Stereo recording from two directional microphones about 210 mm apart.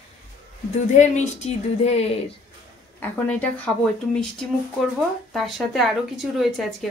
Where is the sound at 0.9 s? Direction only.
35° left (ahead or behind).